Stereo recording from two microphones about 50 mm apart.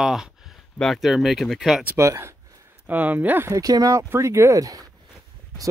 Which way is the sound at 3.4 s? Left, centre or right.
Right.